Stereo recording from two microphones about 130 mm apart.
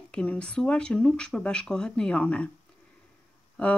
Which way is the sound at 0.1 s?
10° left (ahead or behind).